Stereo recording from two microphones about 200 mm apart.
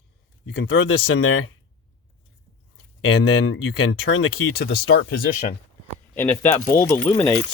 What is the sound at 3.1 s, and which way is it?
Speech, 75° left (ahead or behind).